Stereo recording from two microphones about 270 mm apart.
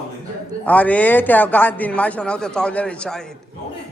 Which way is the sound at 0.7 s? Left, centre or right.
Centre.